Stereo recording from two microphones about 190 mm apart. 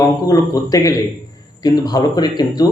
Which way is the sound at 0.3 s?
20° left (ahead or behind).